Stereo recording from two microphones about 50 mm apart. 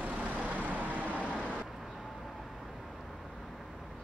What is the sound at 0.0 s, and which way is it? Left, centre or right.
Vehicle, right.